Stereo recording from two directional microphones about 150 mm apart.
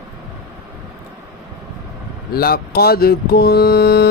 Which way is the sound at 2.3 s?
90° left.